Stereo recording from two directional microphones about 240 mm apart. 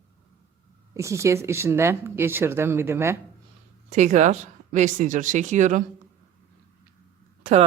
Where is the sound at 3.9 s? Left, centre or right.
Right.